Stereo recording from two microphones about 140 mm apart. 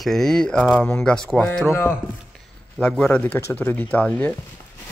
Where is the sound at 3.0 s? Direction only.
10° left (ahead or behind).